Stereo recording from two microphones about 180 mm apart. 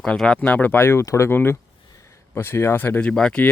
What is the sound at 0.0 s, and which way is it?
A man's voice, 5° left (ahead or behind).